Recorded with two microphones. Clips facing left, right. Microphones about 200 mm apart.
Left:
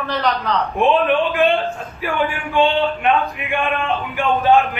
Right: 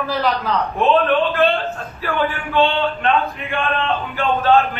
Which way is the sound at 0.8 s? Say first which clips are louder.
Even; 15° left (ahead or behind).